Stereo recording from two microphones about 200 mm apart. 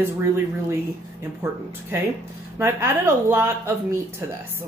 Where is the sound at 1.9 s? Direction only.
10° right (ahead or behind).